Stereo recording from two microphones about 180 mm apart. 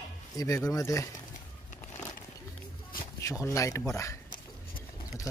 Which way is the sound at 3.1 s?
15° left (ahead or behind).